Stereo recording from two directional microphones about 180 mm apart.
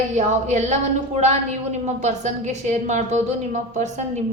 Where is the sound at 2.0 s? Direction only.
40° right (ahead or behind).